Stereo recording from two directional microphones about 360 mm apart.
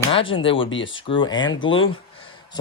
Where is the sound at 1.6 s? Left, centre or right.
Left.